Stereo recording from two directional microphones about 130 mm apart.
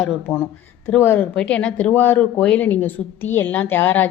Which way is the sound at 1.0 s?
15° left (ahead or behind).